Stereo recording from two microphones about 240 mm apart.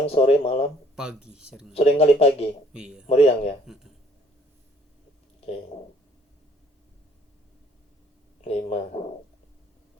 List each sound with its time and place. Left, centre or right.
0.0 s speech: left
0.9 s speech: centre
1.7 s speech: left
2.7 s speech: centre
3.1 s speech: left
8.4 s speech: left